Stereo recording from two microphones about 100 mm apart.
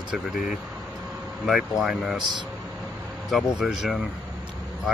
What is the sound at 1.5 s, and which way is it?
Speech, 5° right (ahead or behind).